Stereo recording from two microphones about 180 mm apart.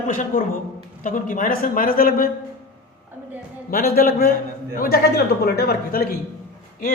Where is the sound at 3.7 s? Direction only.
55° left (ahead or behind).